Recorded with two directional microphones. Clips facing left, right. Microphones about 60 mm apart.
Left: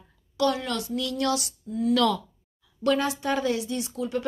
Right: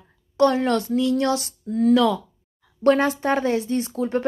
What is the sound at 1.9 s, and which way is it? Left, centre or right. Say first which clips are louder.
Speech: right 4 dB; centre.